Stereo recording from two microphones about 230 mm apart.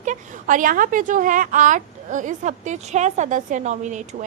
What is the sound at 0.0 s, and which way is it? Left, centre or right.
A woman's voice, right.